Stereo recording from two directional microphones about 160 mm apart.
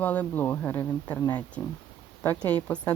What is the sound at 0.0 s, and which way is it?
Speech, 10° left (ahead or behind).